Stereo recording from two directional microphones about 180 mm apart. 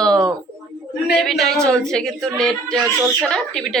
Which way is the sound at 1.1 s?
Centre (ahead or behind).